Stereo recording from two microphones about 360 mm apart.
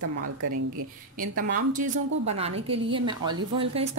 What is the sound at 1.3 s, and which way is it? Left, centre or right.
A woman's voice, right.